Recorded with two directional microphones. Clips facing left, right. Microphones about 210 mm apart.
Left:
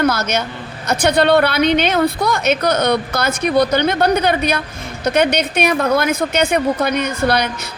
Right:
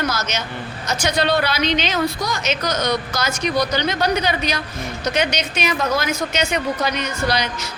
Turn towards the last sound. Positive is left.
turn(degrees=55)  # may be behind; listen again after turning